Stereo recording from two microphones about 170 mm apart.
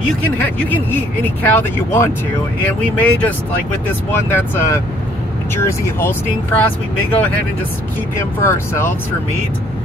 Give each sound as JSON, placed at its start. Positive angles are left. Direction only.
{"t": 0.4, "sound": "speech", "side_deg": 10}
{"t": 8.4, "sound": "speech", "side_deg": 15}